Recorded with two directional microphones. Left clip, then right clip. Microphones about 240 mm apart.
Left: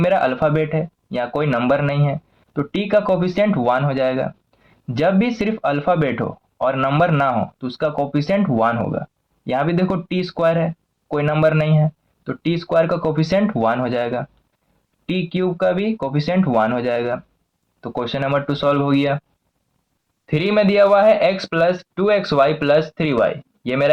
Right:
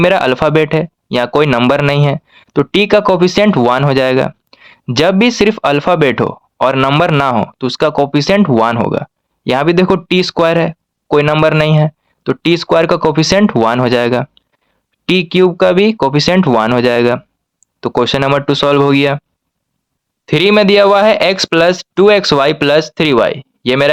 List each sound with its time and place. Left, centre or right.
0.0 s speech: right
20.2 s speech: right